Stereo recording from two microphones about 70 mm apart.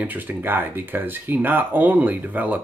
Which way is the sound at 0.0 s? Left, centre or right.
Right.